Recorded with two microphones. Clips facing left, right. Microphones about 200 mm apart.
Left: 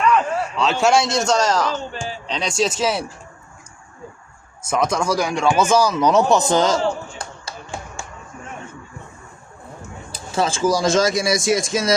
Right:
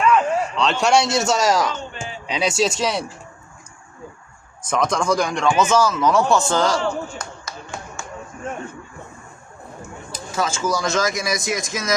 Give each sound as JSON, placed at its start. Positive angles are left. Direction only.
{"t": 0.0, "sound": "a man's voice", "side_deg": 0}
{"t": 4.7, "sound": "speech", "side_deg": 5}
{"t": 6.5, "sound": "a sound", "side_deg": 20}
{"t": 10.1, "sound": "speech", "side_deg": 30}